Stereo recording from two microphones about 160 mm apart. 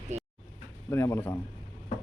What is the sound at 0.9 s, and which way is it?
Speech, 15° left (ahead or behind).